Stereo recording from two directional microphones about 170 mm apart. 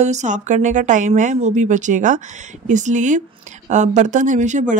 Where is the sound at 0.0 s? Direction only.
45° right (ahead or behind).